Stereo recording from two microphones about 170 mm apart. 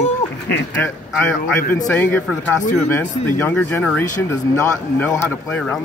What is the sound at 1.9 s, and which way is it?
Speech, 10° left (ahead or behind).